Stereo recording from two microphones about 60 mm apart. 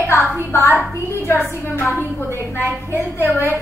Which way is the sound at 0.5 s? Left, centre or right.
Left.